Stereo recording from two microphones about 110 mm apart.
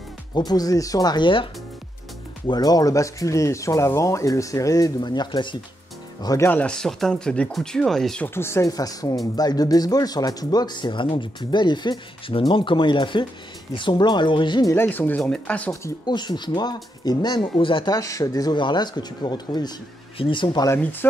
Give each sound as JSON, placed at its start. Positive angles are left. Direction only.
{"t": 0.5, "sound": "speech", "side_deg": 35}
{"t": 6.2, "sound": "speech", "side_deg": 25}
{"t": 6.5, "sound": "speech", "side_deg": 10}
{"t": 8.4, "sound": "speech", "side_deg": 25}
{"t": 14.7, "sound": "speech", "side_deg": 20}
{"t": 16.1, "sound": "speech", "side_deg": 40}
{"t": 17.9, "sound": "speech", "side_deg": 30}
{"t": 20.2, "sound": "speech", "side_deg": 50}
{"t": 20.4, "sound": "speech", "side_deg": 30}
{"t": 21.0, "sound": "speech", "side_deg": 15}